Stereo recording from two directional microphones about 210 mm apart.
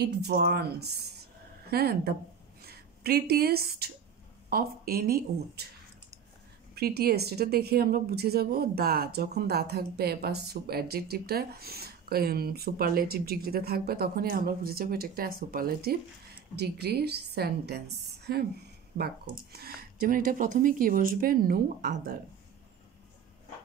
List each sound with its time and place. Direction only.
0.0 s a woman's voice: 50° right (ahead or behind)
6.7 s a woman's voice: 50° right (ahead or behind)
18.0 s a sound: 50° right (ahead or behind)
18.9 s a woman's voice: 45° right (ahead or behind)